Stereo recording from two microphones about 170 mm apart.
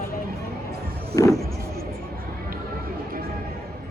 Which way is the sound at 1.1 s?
20° left (ahead or behind).